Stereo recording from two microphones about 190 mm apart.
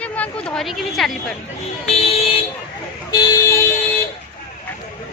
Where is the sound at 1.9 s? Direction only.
35° left (ahead or behind).